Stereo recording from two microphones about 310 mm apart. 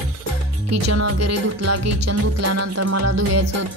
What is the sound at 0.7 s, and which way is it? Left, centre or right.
Music, right.